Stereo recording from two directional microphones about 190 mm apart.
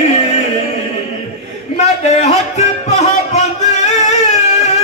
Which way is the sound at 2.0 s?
35° left (ahead or behind).